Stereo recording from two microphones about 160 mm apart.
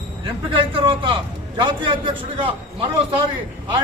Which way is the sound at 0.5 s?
35° right (ahead or behind).